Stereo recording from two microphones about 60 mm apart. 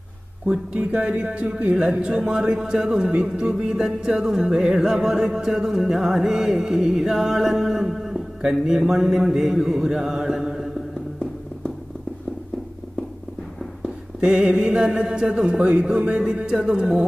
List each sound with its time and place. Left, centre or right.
0.9 s music: centre
14.2 s music: centre